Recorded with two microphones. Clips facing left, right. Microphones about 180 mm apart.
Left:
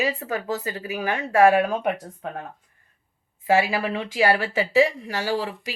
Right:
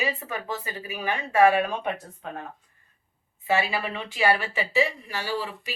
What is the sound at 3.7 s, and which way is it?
Speech, 90° left.